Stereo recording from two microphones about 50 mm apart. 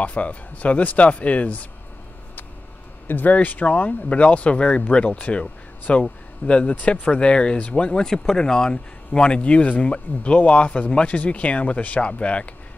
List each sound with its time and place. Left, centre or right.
0.0 s speech: left
3.1 s speech: left